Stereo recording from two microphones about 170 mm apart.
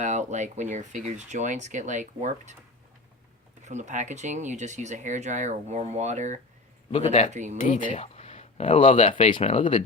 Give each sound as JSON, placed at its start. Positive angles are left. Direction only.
{"t": 0.0, "sound": "speech", "side_deg": -45}
{"t": 3.6, "sound": "speech", "side_deg": -45}
{"t": 6.9, "sound": "speech", "side_deg": 40}
{"t": 7.3, "sound": "speech", "side_deg": -45}
{"t": 7.8, "sound": "speech", "side_deg": 30}